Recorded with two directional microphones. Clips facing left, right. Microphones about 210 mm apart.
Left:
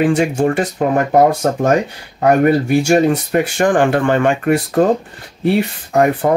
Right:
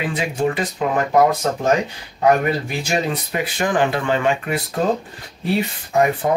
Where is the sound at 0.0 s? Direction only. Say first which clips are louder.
Left 7 dB; 50° left (ahead or behind).